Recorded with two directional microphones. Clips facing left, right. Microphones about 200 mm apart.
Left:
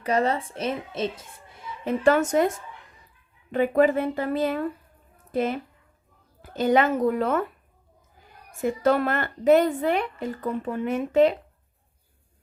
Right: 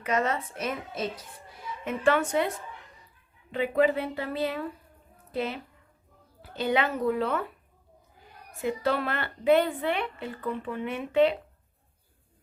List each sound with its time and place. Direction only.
0.0 s a woman's voice: 35° left (ahead or behind)
1.8 s a woman's voice: 35° left (ahead or behind)
8.5 s a woman's voice: 45° left (ahead or behind)